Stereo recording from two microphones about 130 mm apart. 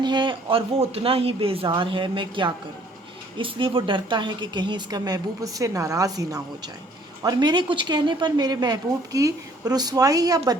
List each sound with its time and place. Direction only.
0.0 s a woman's voice: 35° right (ahead or behind)